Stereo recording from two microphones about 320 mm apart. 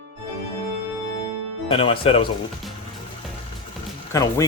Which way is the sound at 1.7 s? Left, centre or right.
Centre.